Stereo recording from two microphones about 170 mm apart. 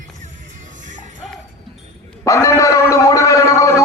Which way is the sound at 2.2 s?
20° left (ahead or behind).